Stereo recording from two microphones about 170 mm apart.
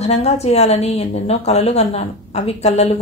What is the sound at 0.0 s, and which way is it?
Speech, 40° left (ahead or behind).